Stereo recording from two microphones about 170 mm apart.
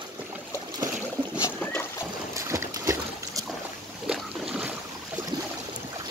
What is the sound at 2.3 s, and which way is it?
Boat, 15° right (ahead or behind).